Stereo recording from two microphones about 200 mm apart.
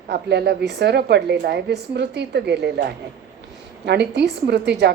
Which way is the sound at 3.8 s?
55° right (ahead or behind).